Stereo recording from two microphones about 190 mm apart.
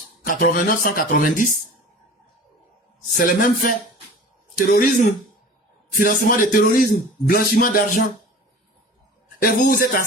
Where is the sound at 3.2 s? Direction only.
45° left (ahead or behind).